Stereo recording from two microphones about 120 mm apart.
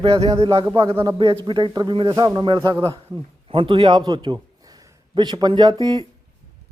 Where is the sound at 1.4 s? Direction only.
40° right (ahead or behind).